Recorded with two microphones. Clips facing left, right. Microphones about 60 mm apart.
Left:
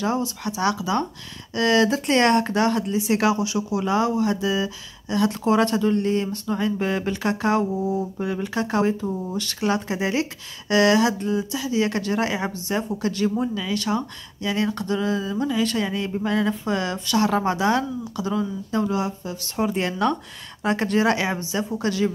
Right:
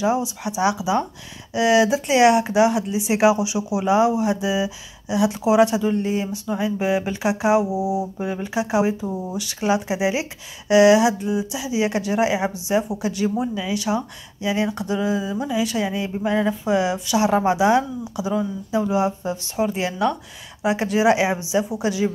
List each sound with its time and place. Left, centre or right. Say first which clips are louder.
0.0 s speech: right 3 dB; centre
19.5 s speech: even; centre